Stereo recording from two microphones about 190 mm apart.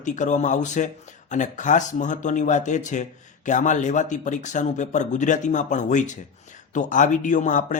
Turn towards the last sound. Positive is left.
turn(degrees=40)  # may be behind; listen again after turning